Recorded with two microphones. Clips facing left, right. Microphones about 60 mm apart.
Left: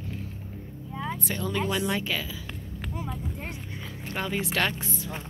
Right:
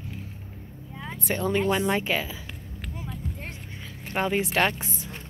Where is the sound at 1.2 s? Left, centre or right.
Right.